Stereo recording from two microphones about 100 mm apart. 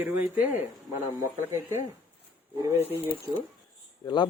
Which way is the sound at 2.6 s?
30° right (ahead or behind).